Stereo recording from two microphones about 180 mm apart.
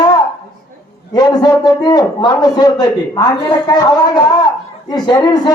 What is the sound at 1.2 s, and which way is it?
A man's voice, 20° left (ahead or behind).